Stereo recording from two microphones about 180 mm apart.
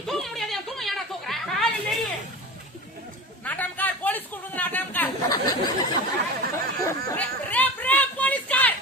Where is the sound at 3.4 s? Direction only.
10° left (ahead or behind).